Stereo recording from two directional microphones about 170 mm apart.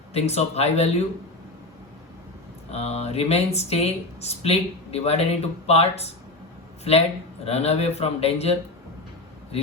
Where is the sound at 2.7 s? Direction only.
40° left (ahead or behind).